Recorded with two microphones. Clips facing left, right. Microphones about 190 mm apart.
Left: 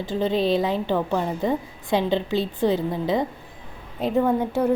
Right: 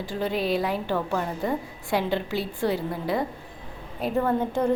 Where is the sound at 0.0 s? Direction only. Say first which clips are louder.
Left 5 dB; 20° left (ahead or behind).